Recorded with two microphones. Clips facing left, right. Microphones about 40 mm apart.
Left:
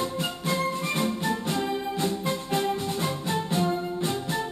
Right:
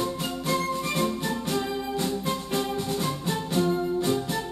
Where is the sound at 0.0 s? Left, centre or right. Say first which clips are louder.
Even; left.